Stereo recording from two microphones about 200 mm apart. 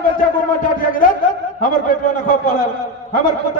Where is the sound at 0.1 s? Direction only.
45° left (ahead or behind).